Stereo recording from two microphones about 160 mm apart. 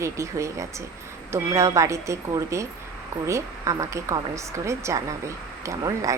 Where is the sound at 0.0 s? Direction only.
20° right (ahead or behind).